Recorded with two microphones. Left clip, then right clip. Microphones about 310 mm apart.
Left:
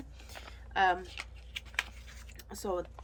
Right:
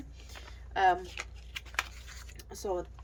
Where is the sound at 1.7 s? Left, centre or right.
Centre.